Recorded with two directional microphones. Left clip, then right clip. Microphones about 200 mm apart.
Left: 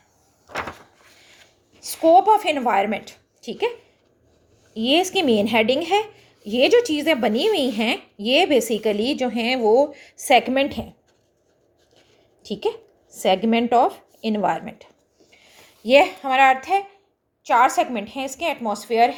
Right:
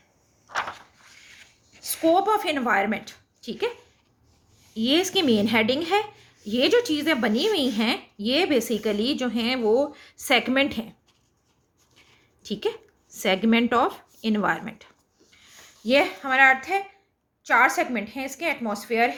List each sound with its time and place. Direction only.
2.1 s a woman's voice: 15° left (ahead or behind)
4.7 s a woman's voice: 5° left (ahead or behind)
12.4 s a woman's voice: centre (ahead or behind); by 19.1 s 15° left (ahead or behind)